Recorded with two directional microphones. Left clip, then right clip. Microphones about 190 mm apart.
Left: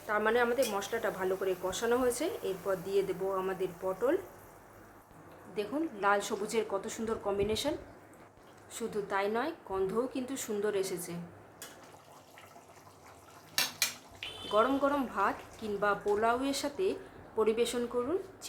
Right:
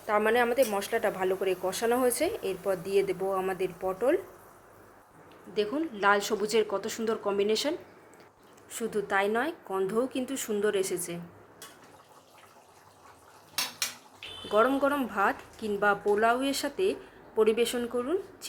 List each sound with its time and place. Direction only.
0.1 s a woman's voice: 20° right (ahead or behind)
5.5 s a woman's voice: 20° right (ahead or behind)
8.7 s a woman's voice: 25° right (ahead or behind)
14.5 s a woman's voice: 20° right (ahead or behind)